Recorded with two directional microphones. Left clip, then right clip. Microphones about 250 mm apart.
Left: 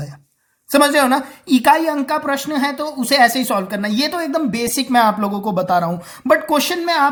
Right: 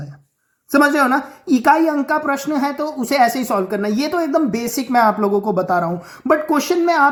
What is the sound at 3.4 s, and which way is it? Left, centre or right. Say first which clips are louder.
Speech: even; left.